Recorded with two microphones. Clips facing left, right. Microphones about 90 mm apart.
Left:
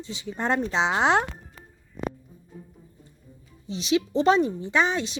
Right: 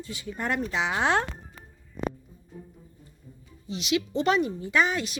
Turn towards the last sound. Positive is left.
turn(degrees=25)  # may be behind; listen again after turning